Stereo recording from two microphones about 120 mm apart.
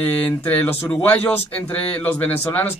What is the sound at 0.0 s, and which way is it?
Speech, 15° left (ahead or behind).